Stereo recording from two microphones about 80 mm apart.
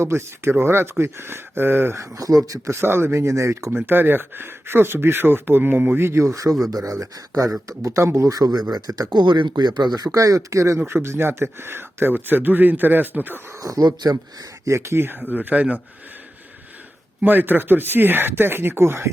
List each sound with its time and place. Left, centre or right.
0.0 s speech: right
2.0 s speech: right
2.5 s speech: right
3.7 s speech: right
13.6 s speech: right
14.6 s speech: right; by 15.8 s centre
17.2 s speech: right